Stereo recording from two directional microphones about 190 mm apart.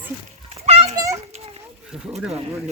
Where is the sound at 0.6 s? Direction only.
35° right (ahead or behind).